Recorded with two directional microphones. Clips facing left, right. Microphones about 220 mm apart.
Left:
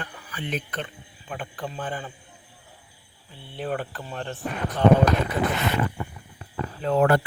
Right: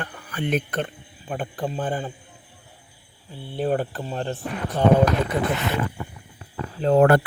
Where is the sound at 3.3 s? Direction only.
40° right (ahead or behind).